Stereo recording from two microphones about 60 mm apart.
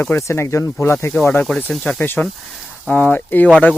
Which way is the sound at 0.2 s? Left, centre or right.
Left.